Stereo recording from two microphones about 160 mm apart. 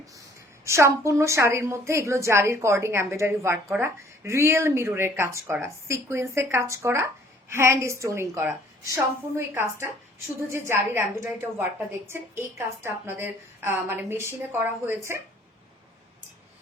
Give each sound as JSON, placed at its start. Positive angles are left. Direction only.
{"t": 0.6, "sound": "speech", "side_deg": -20}